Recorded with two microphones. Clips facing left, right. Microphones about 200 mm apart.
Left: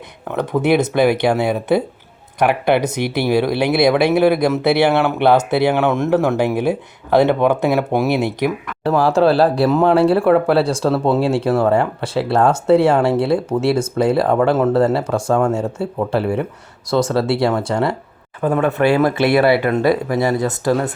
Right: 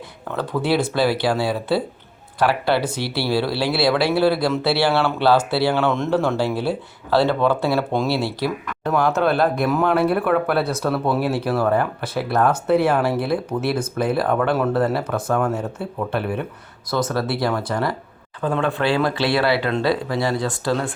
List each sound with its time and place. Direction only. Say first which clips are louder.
0.3 s speech: left 5 dB; 20° left (ahead or behind)
8.8 s speech: left 5 dB; 30° left (ahead or behind)
18.4 s speech: left 5 dB; 15° left (ahead or behind)